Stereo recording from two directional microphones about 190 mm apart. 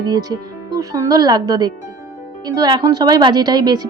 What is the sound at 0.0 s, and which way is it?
Speech, 20° right (ahead or behind).